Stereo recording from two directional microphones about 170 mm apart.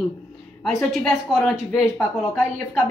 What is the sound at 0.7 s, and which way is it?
Speech, centre (ahead or behind).